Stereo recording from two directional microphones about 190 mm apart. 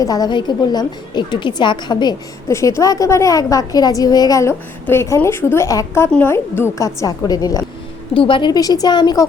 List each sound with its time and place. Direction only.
0.0 s a woman's voice: 20° left (ahead or behind)